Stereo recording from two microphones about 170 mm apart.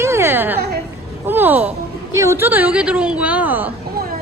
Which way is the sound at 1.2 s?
10° right (ahead or behind).